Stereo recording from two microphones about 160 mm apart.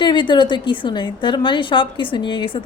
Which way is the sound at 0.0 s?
30° left (ahead or behind).